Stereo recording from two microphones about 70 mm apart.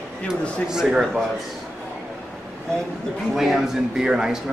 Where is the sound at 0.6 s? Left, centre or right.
Centre.